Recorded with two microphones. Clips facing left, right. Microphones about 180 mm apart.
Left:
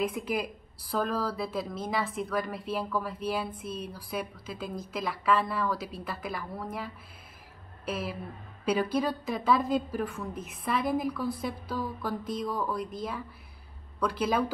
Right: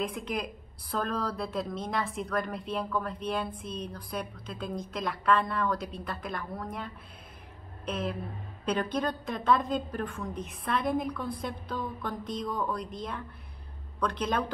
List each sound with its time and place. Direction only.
0.0 s speech: 5° left (ahead or behind)